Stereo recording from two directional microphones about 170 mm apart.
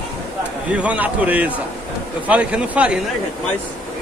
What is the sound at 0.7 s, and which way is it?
A man's voice, 5° right (ahead or behind).